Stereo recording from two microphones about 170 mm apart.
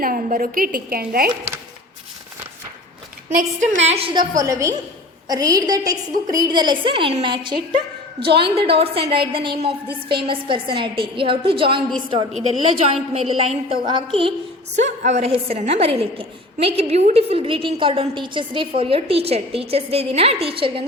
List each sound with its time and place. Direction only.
0.0 s a woman's voice: 55° right (ahead or behind)
3.2 s a woman's voice: 45° right (ahead or behind)
4.4 s a woman's voice: 20° right (ahead or behind)
14.8 s a woman's voice: 40° right (ahead or behind)